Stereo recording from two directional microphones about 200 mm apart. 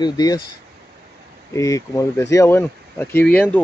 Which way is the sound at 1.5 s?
15° left (ahead or behind).